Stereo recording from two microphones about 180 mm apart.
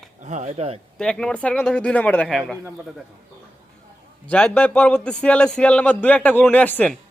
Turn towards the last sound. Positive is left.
turn(degrees=10)  # may be behind; listen again after turning